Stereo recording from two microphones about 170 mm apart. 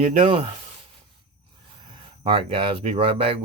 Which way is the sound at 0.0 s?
40° right (ahead or behind).